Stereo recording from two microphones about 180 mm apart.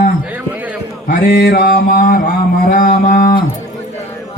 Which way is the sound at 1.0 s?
55° left (ahead or behind).